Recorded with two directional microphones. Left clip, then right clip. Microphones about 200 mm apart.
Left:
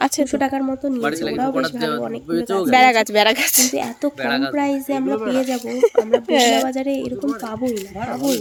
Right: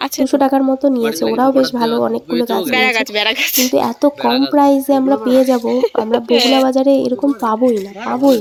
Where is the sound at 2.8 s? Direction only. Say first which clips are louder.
Left 3 dB; 20° left (ahead or behind).